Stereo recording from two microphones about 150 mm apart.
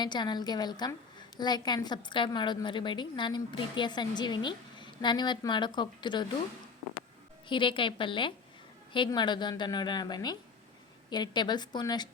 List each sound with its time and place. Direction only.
0.0 s a woman's voice: 30° left (ahead or behind)
7.4 s a woman's voice: 35° left (ahead or behind)